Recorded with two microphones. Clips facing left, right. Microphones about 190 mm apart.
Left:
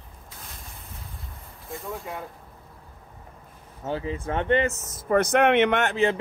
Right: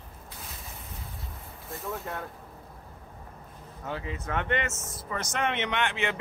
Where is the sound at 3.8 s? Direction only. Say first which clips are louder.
Left 6 dB; 30° left (ahead or behind).